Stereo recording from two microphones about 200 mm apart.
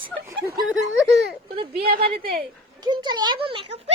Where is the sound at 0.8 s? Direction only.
60° right (ahead or behind).